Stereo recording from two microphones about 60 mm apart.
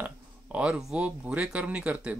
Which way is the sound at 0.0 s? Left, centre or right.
Right.